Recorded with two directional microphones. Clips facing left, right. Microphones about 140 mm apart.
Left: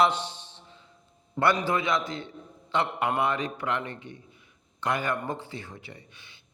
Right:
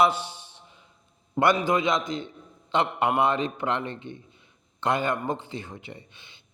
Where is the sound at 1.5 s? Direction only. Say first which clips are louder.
Right 3 dB; 15° right (ahead or behind).